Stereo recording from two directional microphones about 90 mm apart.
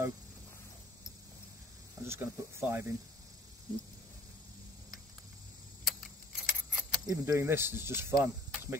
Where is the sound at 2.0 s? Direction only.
30° right (ahead or behind).